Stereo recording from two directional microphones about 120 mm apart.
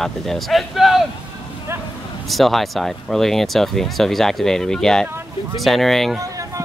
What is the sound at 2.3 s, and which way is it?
Speech, centre (ahead or behind).